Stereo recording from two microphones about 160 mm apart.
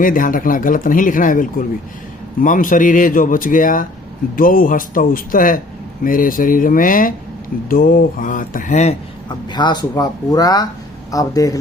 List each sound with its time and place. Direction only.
0.0 s speech: 60° left (ahead or behind)
9.3 s speech: 25° left (ahead or behind)